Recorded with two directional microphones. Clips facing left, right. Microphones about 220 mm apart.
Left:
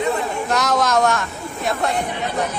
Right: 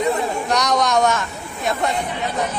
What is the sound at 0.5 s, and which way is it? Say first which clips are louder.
Speech: even; centre (ahead or behind).